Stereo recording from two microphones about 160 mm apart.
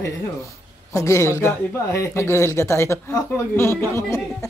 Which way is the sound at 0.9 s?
20° left (ahead or behind).